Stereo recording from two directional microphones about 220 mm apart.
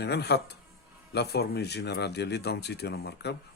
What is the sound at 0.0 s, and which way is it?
Speech, 50° left (ahead or behind).